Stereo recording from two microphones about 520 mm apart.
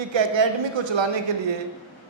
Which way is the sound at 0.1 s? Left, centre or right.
Right.